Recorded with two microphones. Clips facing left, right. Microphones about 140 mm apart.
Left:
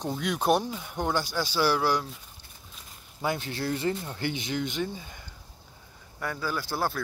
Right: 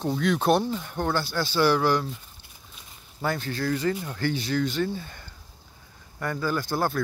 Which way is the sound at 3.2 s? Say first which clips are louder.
Right 2 dB; 20° left (ahead or behind).